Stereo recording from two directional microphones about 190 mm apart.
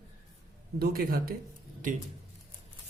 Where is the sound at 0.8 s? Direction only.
50° right (ahead or behind).